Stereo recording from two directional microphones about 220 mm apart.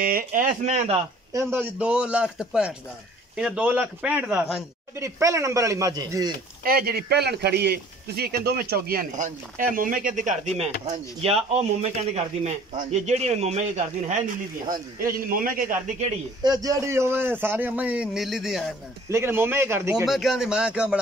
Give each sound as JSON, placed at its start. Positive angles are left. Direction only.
{"t": 0.0, "sound": "speech", "side_deg": -40}
{"t": 1.3, "sound": "a man's voice", "side_deg": -10}
{"t": 6.6, "sound": "speech", "side_deg": -45}
{"t": 16.4, "sound": "a man's voice", "side_deg": -15}
{"t": 19.0, "sound": "a man's voice", "side_deg": -10}
{"t": 20.1, "sound": "a man's voice", "side_deg": 0}